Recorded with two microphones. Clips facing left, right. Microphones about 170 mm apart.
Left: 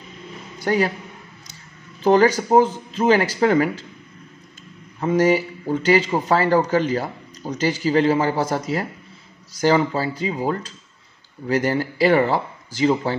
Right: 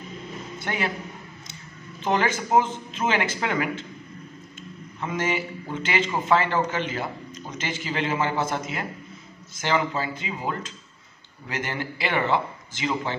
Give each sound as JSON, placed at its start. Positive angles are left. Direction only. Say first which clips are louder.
{"t": 0.7, "sound": "a man's voice", "louder": "left 9 dB", "side_deg": 40}
{"t": 2.0, "sound": "a man's voice", "louder": "left 9 dB", "side_deg": 35}
{"t": 5.0, "sound": "a man's voice", "louder": "left 10 dB", "side_deg": 35}